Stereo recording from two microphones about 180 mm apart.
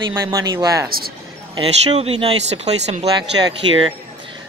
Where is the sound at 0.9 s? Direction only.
55° right (ahead or behind).